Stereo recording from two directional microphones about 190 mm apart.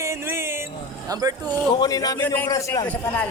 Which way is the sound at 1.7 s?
20° left (ahead or behind).